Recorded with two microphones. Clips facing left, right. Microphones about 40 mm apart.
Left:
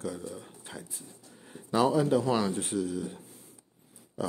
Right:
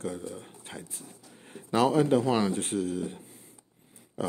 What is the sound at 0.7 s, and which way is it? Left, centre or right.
Speech, right.